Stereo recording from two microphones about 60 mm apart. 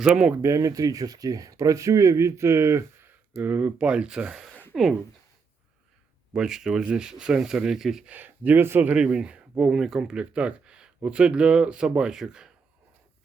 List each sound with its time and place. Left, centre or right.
0.0 s speech: centre
0.4 s speech: right
3.4 s speech: right
3.8 s speech: centre
6.3 s speech: centre
8.0 s speech: right
9.1 s speech: centre